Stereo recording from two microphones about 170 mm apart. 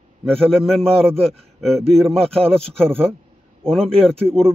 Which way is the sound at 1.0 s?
35° right (ahead or behind).